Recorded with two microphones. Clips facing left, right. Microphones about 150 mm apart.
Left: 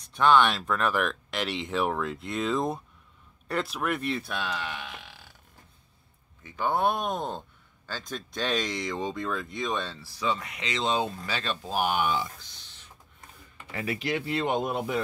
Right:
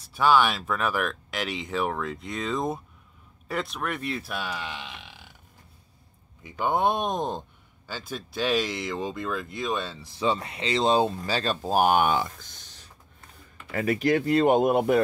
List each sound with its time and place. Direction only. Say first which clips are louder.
0.0 s speech: even; 5° right (ahead or behind)
6.4 s speech: right 2 dB; 15° right (ahead or behind)
10.0 s speech: right 7 dB; 30° right (ahead or behind); by 15.0 s 55° right (ahead or behind)